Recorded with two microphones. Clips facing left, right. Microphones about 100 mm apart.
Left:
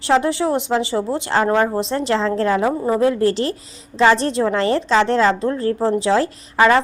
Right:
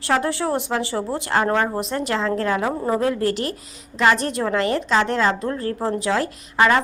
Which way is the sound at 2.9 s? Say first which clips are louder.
Left 6 dB; 30° left (ahead or behind).